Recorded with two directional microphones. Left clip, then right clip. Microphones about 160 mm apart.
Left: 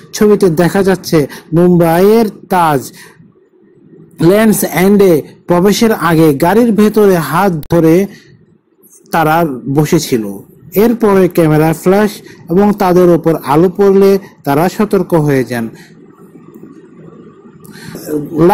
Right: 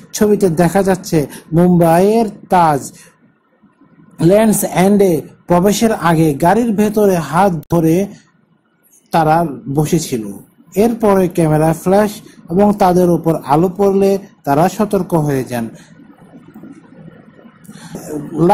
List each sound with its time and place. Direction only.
0.1 s a man's voice: 20° left (ahead or behind)
4.2 s a man's voice: 25° left (ahead or behind)
17.7 s a sound: 20° left (ahead or behind)